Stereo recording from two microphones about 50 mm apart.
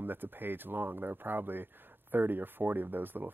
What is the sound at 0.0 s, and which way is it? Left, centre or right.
Speech, right.